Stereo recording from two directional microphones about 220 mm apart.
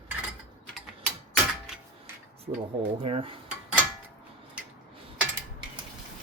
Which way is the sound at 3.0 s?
25° right (ahead or behind).